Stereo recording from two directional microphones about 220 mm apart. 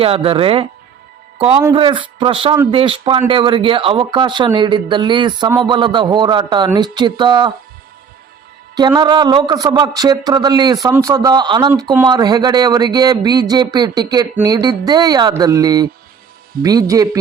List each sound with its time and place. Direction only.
0.0 s speech: 25° right (ahead or behind)
8.7 s speech: 20° right (ahead or behind)